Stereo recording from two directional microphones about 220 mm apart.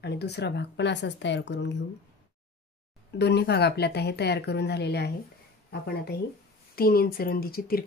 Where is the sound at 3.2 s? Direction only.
50° left (ahead or behind).